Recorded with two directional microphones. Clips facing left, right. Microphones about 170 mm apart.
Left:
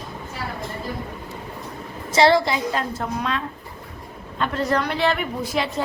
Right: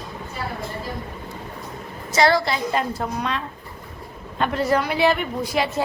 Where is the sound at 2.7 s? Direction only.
Centre (ahead or behind).